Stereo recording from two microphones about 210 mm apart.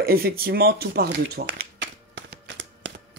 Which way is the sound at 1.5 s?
55° right (ahead or behind).